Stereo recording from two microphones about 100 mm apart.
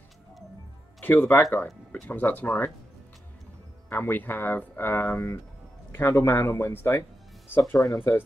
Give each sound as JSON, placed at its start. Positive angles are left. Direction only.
{"t": 1.0, "sound": "speech", "side_deg": 20}
{"t": 3.9, "sound": "speech", "side_deg": 20}